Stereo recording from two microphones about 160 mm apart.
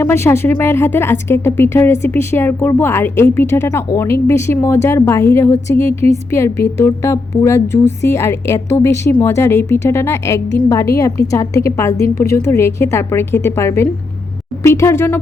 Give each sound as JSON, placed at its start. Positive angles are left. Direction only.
{"t": 0.0, "sound": "a woman's voice", "side_deg": 15}